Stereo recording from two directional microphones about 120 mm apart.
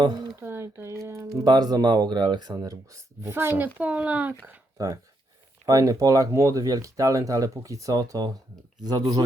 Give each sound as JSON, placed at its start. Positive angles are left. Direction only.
{"t": 0.0, "sound": "speech", "side_deg": -35}
{"t": 0.3, "sound": "speech", "side_deg": -20}
{"t": 1.5, "sound": "speech", "side_deg": -35}
{"t": 4.8, "sound": "speech", "side_deg": -25}